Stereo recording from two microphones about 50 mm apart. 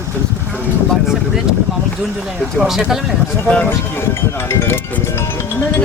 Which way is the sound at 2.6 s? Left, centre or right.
Centre.